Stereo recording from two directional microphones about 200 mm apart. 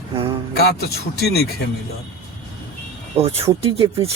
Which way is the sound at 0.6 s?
55° left (ahead or behind).